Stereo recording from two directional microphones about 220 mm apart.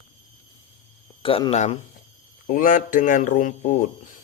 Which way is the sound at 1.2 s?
25° left (ahead or behind).